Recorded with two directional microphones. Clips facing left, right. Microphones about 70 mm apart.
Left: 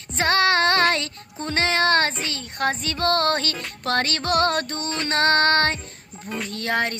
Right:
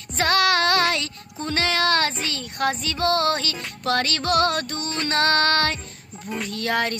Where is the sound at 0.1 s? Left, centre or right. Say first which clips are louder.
Even; left.